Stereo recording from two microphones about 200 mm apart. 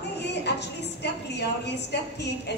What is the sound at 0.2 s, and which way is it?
Music, 60° left (ahead or behind).